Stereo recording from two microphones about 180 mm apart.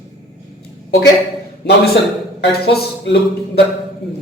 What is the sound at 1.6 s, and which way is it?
A woman's voice, 70° left (ahead or behind).